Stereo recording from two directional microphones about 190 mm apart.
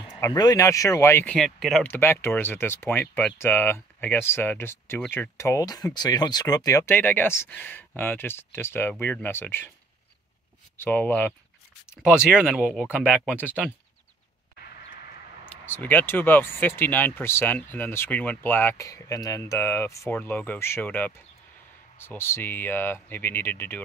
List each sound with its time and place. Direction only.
0.2 s speech: 20° left (ahead or behind)
10.8 s speech: 10° left (ahead or behind)
12.0 s speech: 5° right (ahead or behind)
14.6 s a sound: 60° left (ahead or behind)
15.5 s speech: 10° left (ahead or behind)